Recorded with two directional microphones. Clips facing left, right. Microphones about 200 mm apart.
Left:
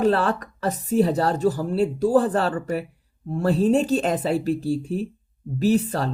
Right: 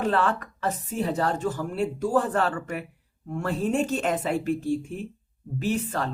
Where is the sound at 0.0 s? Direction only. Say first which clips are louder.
Left 4 dB; 35° left (ahead or behind).